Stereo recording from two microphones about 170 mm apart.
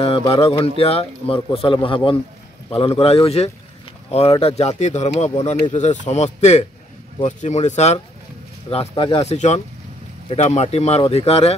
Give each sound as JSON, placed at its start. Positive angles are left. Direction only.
{"t": 0.0, "sound": "a man's voice", "side_deg": 35}